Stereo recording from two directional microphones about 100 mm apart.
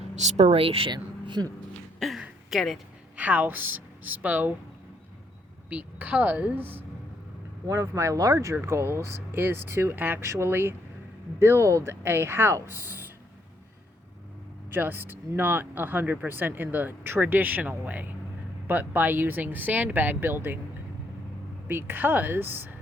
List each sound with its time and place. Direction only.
0.3 s speech: 80° right
0.9 s speech: 45° right (ahead or behind)
2.0 s speech: centre (ahead or behind)
3.2 s a woman's voice: 15° right (ahead or behind)
5.6 s a woman's voice: 15° right (ahead or behind)
7.7 s speech: 30° right (ahead or behind)
14.7 s speech: 20° right (ahead or behind)
21.7 s speech: 20° right (ahead or behind)